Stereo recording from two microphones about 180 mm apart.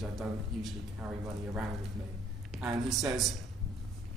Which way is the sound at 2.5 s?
Centre (ahead or behind).